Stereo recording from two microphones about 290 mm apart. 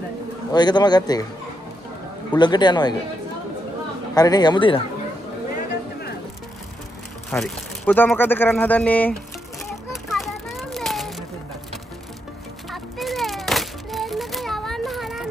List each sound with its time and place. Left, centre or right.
0.5 s a man's voice: centre
2.3 s a man's voice: centre
4.1 s a man's voice: centre
7.2 s speech: centre
10.1 s a sound: centre
12.7 s music: centre